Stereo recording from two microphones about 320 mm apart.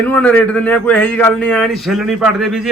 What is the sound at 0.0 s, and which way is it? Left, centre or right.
A man's voice, centre.